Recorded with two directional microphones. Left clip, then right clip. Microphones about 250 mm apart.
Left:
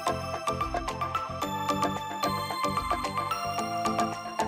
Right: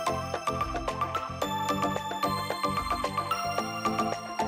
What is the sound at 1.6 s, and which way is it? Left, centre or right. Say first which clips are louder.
Music: even; centre.